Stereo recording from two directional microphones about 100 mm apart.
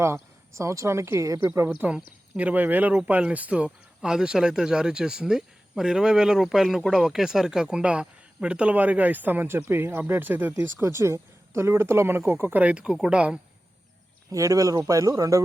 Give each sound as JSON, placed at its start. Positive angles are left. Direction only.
{"t": 0.0, "sound": "speech", "side_deg": -30}
{"t": 1.8, "sound": "speech", "side_deg": -20}
{"t": 14.3, "sound": "speech", "side_deg": -35}